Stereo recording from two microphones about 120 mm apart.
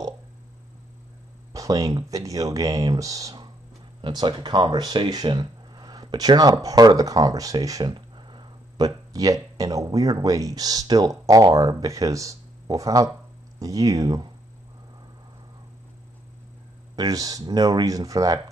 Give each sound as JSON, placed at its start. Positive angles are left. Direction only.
{"t": 1.5, "sound": "speech", "side_deg": -30}
{"t": 4.0, "sound": "speech", "side_deg": -40}
{"t": 16.9, "sound": "speech", "side_deg": -30}